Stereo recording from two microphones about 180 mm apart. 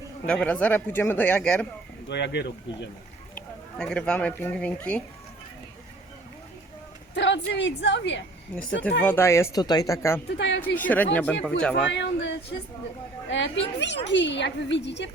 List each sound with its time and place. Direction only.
0.3 s speech: 5° left (ahead or behind)
2.0 s a woman's voice: 75° left (ahead or behind)
3.3 s speech: 5° left (ahead or behind)
7.1 s a woman's voice: 80° left
8.5 s speech: 5° left (ahead or behind)
10.3 s a woman's voice: 75° left (ahead or behind)
10.8 s speech: 10° left (ahead or behind)
11.9 s a woman's voice: 80° left